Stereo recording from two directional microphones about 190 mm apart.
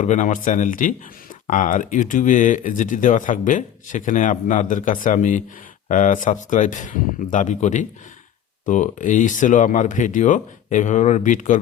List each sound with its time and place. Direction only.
0.0 s speech: 40° left (ahead or behind)